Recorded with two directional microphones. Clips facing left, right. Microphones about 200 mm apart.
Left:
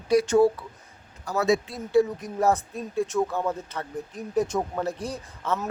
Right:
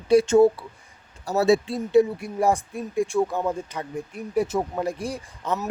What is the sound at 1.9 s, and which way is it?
Speech, 20° right (ahead or behind).